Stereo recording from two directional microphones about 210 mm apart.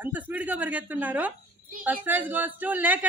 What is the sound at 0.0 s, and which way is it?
A man's voice, 10° right (ahead or behind).